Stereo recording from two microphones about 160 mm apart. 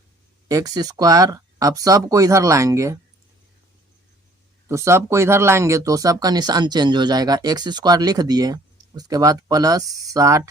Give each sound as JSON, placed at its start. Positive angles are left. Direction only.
{"t": 0.4, "sound": "speech", "side_deg": -25}
{"t": 4.7, "sound": "speech", "side_deg": -15}